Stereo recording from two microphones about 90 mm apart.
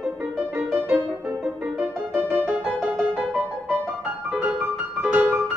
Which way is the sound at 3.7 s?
5° right (ahead or behind).